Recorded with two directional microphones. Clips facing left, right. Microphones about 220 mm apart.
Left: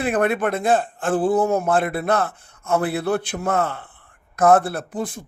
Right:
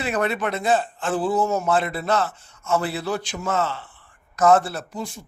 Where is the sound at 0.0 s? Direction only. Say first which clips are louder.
Left 4 dB; 55° left (ahead or behind).